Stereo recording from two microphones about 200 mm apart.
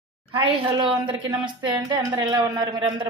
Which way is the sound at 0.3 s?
25° right (ahead or behind).